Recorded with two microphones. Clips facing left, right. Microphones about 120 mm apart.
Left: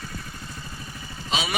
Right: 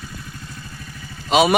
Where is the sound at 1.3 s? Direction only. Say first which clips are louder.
Right 13 dB; 60° right (ahead or behind).